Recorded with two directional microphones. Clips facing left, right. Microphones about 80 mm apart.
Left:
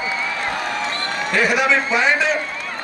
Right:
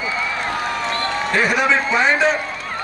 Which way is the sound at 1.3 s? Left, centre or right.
Right.